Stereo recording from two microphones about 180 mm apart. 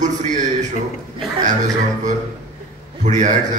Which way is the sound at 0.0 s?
45° right (ahead or behind).